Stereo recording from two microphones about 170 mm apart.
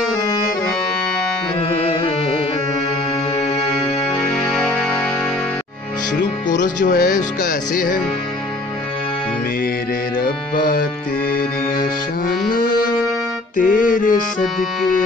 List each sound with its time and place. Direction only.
1.6 s music: 35° left (ahead or behind)
4.1 s music: 5° left (ahead or behind)
6.5 s speech: 50° left (ahead or behind)
7.4 s music: 55° left (ahead or behind)
10.2 s music: 65° left (ahead or behind)
12.3 s music: 55° left (ahead or behind)
14.4 s music: centre (ahead or behind)